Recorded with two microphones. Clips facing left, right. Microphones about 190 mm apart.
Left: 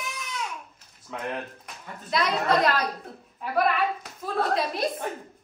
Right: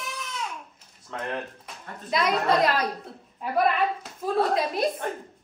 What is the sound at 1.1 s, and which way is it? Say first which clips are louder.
A woman's voice: right 1 dB; 5° left (ahead or behind).